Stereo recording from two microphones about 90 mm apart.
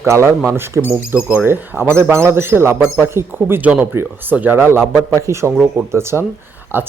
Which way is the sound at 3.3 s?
20° right (ahead or behind).